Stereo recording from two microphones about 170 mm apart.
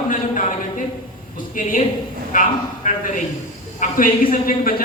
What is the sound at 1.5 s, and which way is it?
A woman's voice, 50° left (ahead or behind).